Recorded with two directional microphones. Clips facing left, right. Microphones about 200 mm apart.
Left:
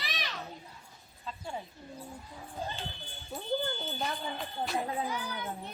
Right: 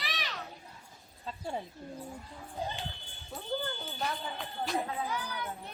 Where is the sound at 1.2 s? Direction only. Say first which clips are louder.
Right 2 dB; 35° right (ahead or behind).